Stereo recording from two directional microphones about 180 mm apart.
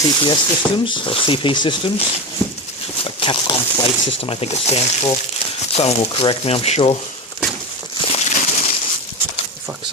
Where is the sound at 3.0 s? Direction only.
30° left (ahead or behind).